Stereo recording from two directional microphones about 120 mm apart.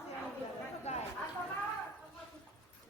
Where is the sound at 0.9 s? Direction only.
60° left (ahead or behind).